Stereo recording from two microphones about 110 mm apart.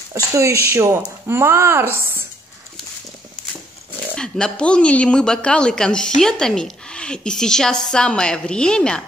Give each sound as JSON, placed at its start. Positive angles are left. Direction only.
{"t": 0.1, "sound": "speech", "side_deg": -25}
{"t": 4.1, "sound": "speech", "side_deg": 10}